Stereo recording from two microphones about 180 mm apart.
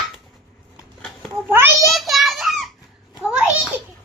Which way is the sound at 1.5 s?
10° right (ahead or behind).